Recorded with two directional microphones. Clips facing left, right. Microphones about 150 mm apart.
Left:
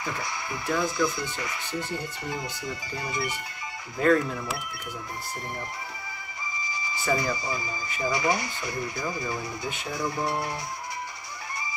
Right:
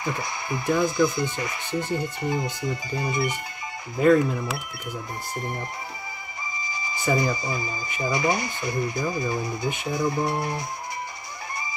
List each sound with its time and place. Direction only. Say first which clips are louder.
0.0 s speech: right 3 dB; 20° right (ahead or behind)
7.1 s speech: right 3 dB; 20° right (ahead or behind)